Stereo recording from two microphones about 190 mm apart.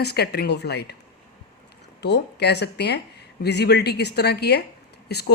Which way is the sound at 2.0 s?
65° left (ahead or behind).